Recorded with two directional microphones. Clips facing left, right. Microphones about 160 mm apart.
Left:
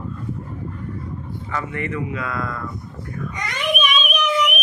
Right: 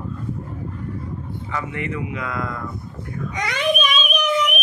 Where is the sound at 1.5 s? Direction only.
20° right (ahead or behind).